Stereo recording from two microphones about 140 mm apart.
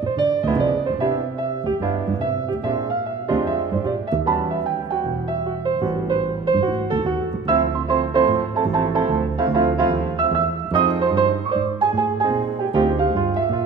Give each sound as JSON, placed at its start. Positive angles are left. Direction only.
{"t": 0.3, "sound": "music", "side_deg": -30}
{"t": 6.0, "sound": "music", "side_deg": -30}